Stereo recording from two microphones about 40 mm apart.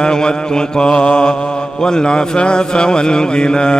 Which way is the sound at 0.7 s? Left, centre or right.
Left.